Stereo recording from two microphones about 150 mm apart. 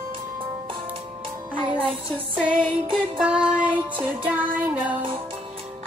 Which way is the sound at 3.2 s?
5° right (ahead or behind).